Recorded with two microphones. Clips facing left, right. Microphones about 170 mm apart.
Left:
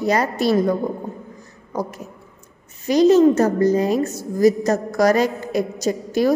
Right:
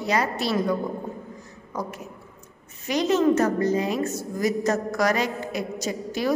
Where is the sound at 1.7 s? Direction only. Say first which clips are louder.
Left 5 dB; 35° left (ahead or behind).